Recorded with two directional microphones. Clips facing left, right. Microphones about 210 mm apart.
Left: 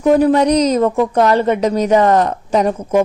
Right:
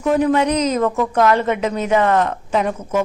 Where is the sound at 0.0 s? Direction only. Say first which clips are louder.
Left 5 dB; 35° left (ahead or behind).